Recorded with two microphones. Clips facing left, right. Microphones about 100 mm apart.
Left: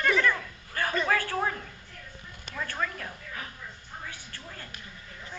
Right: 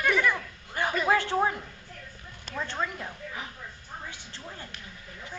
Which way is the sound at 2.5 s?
20° right (ahead or behind).